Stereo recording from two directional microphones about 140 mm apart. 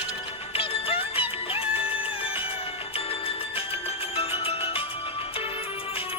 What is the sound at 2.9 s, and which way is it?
Music, 45° left (ahead or behind).